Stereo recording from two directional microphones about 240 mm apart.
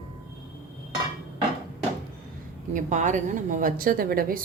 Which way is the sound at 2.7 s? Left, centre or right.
Right.